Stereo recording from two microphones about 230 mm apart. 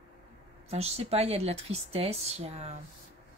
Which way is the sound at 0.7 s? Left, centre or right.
Right.